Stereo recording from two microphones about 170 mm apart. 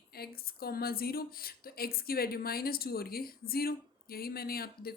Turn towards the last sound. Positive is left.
turn(degrees=65)  # may be behind; listen again after turning